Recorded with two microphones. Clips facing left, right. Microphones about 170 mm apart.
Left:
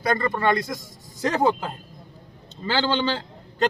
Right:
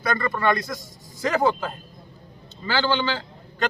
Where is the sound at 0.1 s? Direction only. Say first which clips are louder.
Left 1 dB; 30° left (ahead or behind).